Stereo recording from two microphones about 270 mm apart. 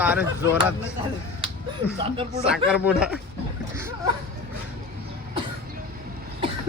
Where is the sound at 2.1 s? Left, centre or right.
Right.